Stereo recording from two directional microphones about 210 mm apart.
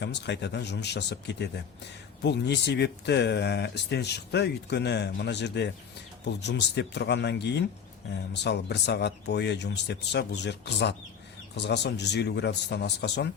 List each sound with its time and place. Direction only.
0.0 s speech: 55° left (ahead or behind)